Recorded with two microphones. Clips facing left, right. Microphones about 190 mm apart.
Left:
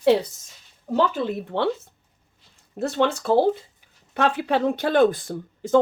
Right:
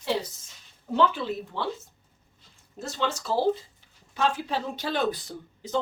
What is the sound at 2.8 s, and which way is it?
Speech, 60° left (ahead or behind).